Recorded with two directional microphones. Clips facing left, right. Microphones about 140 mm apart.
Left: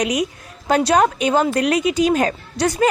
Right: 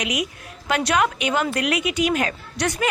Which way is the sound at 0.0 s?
35° left (ahead or behind).